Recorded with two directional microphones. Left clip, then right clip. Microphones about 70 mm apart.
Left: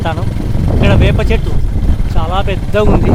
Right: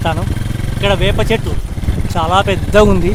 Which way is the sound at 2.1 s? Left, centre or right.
Right.